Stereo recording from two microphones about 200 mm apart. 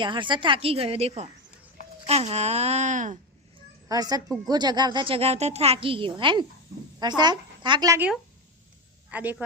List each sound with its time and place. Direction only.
0.0 s a woman's voice: 25° right (ahead or behind); by 3.2 s 40° right (ahead or behind)
3.8 s a woman's voice: 20° right (ahead or behind)